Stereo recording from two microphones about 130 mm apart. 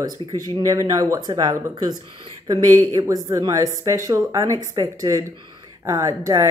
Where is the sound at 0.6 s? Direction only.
25° right (ahead or behind).